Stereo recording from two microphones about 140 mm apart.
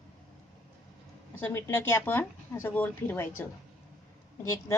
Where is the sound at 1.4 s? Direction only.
15° left (ahead or behind).